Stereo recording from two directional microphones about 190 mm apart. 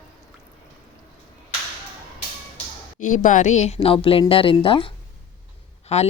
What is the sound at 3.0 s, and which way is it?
Speech, 40° left (ahead or behind).